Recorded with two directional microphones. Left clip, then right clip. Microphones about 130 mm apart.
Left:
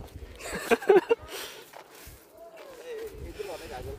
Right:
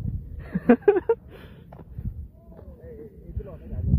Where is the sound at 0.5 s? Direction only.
20° left (ahead or behind).